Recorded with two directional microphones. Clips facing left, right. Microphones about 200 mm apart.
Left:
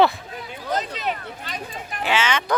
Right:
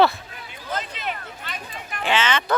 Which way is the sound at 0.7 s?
40° left (ahead or behind).